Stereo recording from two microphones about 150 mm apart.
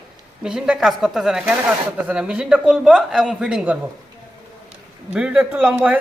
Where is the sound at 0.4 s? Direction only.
5° right (ahead or behind).